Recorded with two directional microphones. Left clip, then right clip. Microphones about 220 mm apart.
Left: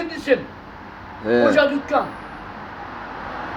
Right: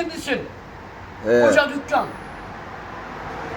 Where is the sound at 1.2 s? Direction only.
25° left (ahead or behind).